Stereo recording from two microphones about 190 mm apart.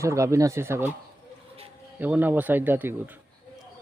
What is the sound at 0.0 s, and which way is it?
Speech, 15° right (ahead or behind).